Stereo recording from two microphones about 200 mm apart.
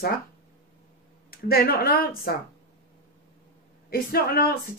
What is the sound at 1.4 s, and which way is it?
Speech, 50° left (ahead or behind).